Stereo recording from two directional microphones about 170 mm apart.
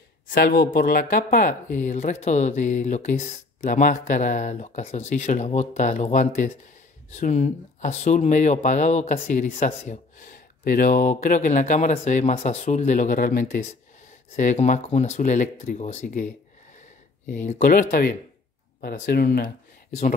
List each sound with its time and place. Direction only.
0.3 s speech: 65° left (ahead or behind); by 16.3 s 45° left (ahead or behind)
17.3 s speech: 45° left (ahead or behind)
18.8 s speech: 80° left
19.2 s speech: 55° left (ahead or behind)